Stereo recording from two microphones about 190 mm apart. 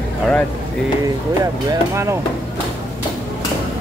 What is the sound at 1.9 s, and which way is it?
Speech, 15° right (ahead or behind).